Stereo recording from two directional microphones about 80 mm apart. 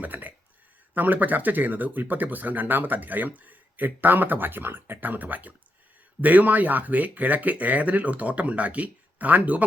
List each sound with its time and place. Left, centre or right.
0.0 s speech: right